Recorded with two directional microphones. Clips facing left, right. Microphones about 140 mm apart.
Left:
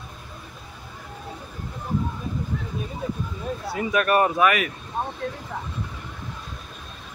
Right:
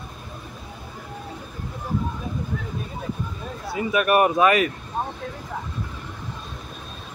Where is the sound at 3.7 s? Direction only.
10° right (ahead or behind).